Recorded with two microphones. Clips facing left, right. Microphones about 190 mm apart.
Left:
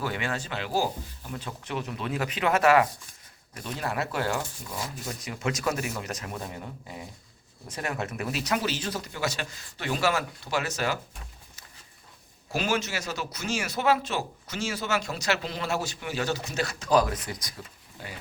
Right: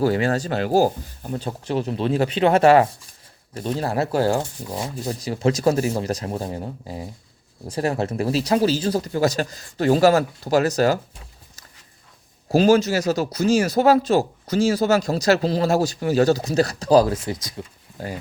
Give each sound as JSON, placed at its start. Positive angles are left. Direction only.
{"t": 0.0, "sound": "speech", "side_deg": -35}
{"t": 1.4, "sound": "speech", "side_deg": -35}
{"t": 12.5, "sound": "speech", "side_deg": -35}
{"t": 18.0, "sound": "speech", "side_deg": -40}